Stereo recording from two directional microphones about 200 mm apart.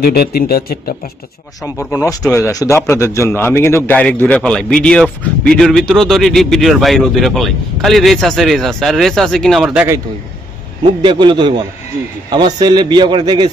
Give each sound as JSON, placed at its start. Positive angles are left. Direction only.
{"t": 0.0, "sound": "speech", "side_deg": 50}
{"t": 2.2, "sound": "a man's voice", "side_deg": 10}
{"t": 11.0, "sound": "a man's voice", "side_deg": -25}